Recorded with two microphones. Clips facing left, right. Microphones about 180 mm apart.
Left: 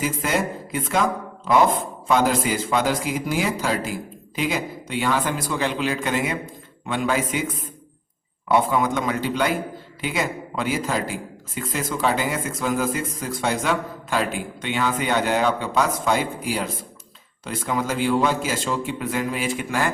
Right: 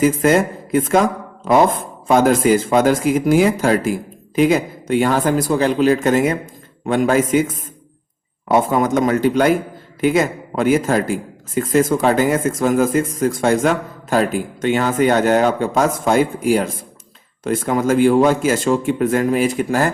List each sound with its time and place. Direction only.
0.0 s a man's voice: 50° right (ahead or behind)